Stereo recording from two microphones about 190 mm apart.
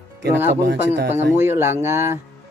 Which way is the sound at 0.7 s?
65° right (ahead or behind).